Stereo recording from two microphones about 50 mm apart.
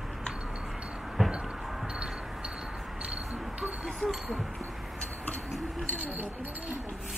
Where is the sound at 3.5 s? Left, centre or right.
Right.